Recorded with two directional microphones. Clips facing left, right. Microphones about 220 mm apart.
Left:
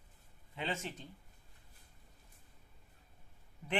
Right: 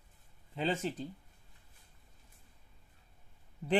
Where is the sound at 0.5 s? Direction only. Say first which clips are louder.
Right 7 dB; 35° right (ahead or behind).